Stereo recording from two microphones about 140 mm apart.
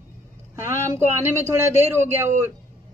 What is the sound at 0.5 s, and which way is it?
A man's voice, 20° right (ahead or behind).